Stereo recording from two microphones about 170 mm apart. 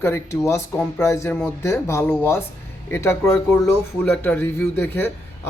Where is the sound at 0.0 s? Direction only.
15° left (ahead or behind).